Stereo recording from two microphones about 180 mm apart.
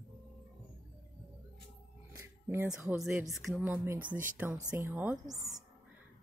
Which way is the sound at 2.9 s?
5° right (ahead or behind).